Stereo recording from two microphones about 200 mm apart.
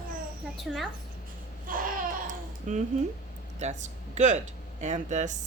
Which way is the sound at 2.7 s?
35° right (ahead or behind).